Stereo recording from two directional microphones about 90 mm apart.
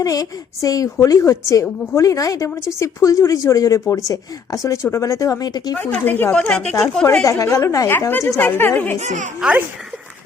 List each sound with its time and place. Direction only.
0.0 s speech: 40° left (ahead or behind)
5.7 s speech: 20° left (ahead or behind)
6.3 s speech: 10° left (ahead or behind)
7.3 s speech: 35° left (ahead or behind)
7.9 s speech: 25° left (ahead or behind)
9.4 s a child's voice: 5° right (ahead or behind)